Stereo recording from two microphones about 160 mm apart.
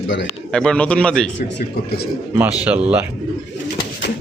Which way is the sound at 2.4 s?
10° right (ahead or behind).